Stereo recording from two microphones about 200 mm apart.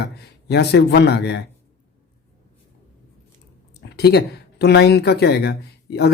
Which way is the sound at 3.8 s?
55° left (ahead or behind).